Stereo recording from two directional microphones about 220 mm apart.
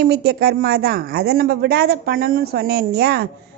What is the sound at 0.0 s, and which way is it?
A woman's voice, 45° right (ahead or behind).